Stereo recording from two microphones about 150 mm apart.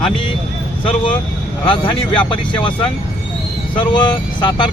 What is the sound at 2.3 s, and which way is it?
Speech, 35° left (ahead or behind).